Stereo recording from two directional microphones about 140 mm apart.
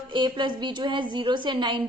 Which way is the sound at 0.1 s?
35° right (ahead or behind).